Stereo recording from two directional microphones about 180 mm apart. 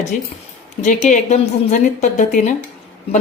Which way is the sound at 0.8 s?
45° left (ahead or behind).